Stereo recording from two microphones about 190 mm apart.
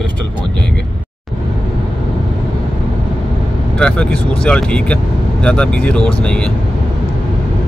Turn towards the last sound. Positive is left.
turn(degrees=5)  # may be behind; listen again after turning